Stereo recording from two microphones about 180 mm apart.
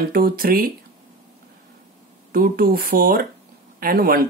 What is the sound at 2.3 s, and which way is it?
Speech, 55° right (ahead or behind).